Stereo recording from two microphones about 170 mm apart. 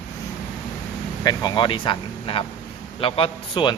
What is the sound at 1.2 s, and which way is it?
A man's voice, 25° left (ahead or behind).